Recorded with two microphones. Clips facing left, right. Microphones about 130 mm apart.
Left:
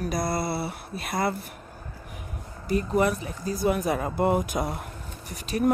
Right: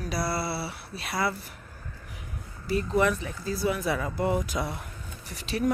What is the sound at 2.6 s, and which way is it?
Speech, 40° left (ahead or behind).